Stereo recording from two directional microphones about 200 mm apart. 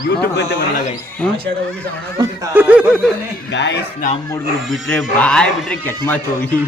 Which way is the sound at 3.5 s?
60° left (ahead or behind).